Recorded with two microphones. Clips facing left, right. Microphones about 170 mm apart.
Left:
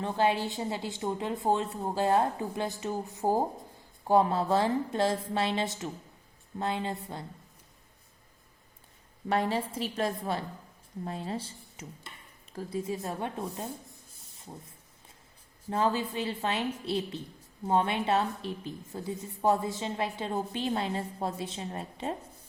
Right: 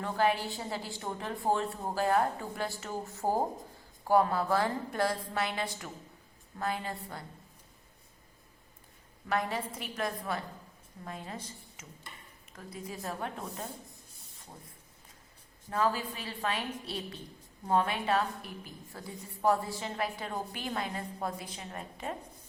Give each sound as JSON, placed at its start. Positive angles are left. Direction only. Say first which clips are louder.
{"t": 0.0, "sound": "a woman's voice", "louder": "left 2 dB", "side_deg": 25}
{"t": 9.3, "sound": "a woman's voice", "louder": "left 4 dB", "side_deg": 30}
{"t": 15.7, "sound": "a woman's voice", "louder": "left 3 dB", "side_deg": 25}